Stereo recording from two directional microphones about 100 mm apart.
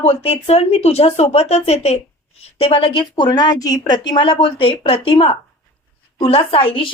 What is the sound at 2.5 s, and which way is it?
A woman's voice, 70° left (ahead or behind).